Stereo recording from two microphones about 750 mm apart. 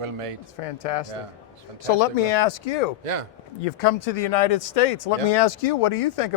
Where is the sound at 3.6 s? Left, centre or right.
Left.